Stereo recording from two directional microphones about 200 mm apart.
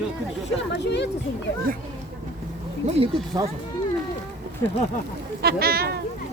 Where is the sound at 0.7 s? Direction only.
60° left (ahead or behind).